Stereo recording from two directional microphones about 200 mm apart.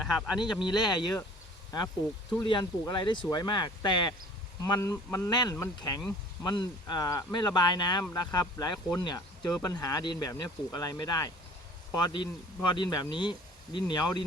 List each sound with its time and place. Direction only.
0.0 s speech: centre (ahead or behind)
0.6 s speech: 20° left (ahead or behind)